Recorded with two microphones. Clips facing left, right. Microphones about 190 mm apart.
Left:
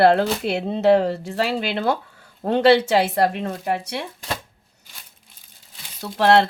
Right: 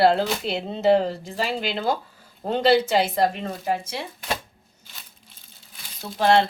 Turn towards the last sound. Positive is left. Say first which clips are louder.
# left 3 dB
turn(degrees=70)  # may be behind; listen again after turning